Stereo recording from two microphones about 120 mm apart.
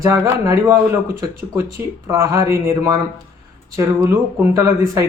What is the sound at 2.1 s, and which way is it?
Speech, 30° right (ahead or behind).